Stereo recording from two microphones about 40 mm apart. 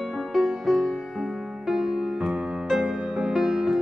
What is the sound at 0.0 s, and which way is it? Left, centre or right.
Music, centre.